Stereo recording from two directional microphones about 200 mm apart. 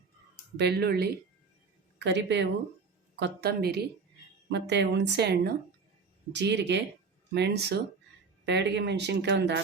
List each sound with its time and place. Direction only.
0.5 s speech: 55° right (ahead or behind)